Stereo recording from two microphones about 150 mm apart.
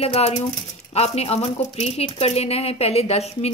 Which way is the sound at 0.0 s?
40° left (ahead or behind).